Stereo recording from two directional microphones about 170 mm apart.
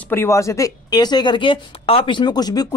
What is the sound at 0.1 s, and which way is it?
Speech, 15° left (ahead or behind).